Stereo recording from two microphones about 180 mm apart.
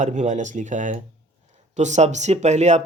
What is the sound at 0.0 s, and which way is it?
Speech, 40° right (ahead or behind).